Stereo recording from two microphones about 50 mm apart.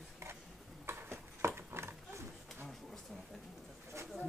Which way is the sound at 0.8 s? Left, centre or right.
Right.